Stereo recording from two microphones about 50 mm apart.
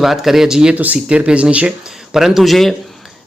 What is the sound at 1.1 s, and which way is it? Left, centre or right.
Speech, right.